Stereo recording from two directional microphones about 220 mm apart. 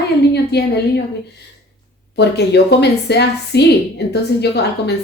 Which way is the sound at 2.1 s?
50° left (ahead or behind).